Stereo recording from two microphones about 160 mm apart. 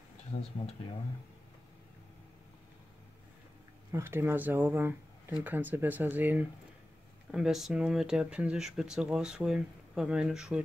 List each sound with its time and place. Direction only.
0.3 s speech: 45° left (ahead or behind)
3.9 s speech: 15° right (ahead or behind)